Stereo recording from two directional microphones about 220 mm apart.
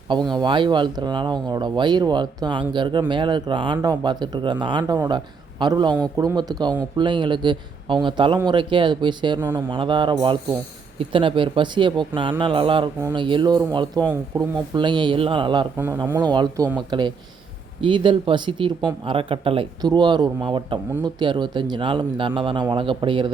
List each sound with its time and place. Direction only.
0.1 s speech: 20° right (ahead or behind)
9.4 s speech: 10° right (ahead or behind)
9.6 s speech: 20° right (ahead or behind)